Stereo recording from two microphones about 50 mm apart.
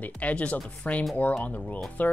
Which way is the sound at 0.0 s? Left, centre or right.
Left.